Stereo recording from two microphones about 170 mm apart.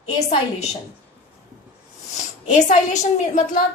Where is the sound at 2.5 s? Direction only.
45° left (ahead or behind).